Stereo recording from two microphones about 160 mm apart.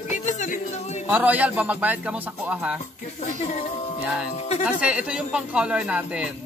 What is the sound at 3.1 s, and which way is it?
Speech, 50° left (ahead or behind).